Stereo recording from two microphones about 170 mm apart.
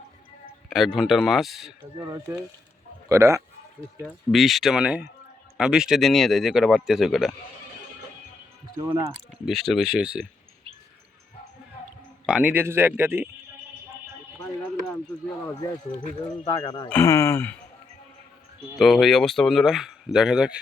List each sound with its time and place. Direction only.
0.7 s speech: centre (ahead or behind)
2.0 s speech: 20° right (ahead or behind)
4.0 s speech: centre (ahead or behind)
8.8 s speech: 20° right (ahead or behind)
9.5 s speech: centre (ahead or behind)
12.2 s speech: 5° right (ahead or behind)
16.5 s speech: 25° left (ahead or behind)
16.9 s speech: 15° left (ahead or behind)
18.8 s speech: centre (ahead or behind)